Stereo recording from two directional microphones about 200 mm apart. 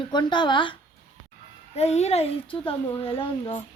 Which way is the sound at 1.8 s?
35° left (ahead or behind).